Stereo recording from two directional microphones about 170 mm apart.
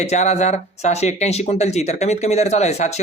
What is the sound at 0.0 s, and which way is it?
Speech, 40° left (ahead or behind).